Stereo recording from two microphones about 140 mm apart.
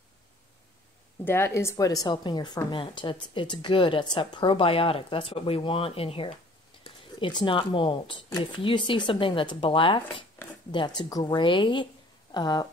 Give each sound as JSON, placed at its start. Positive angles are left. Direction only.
{"t": 1.2, "sound": "speech", "side_deg": 15}